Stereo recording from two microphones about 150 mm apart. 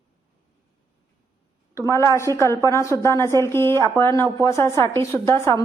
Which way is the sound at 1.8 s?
20° left (ahead or behind).